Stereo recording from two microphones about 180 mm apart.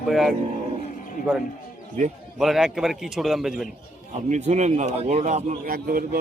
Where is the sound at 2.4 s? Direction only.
Centre (ahead or behind).